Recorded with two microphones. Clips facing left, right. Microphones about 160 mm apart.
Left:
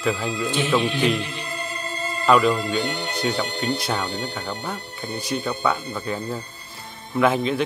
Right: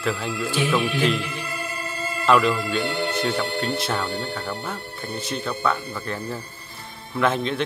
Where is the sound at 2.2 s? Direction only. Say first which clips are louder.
Left 1 dB; centre (ahead or behind).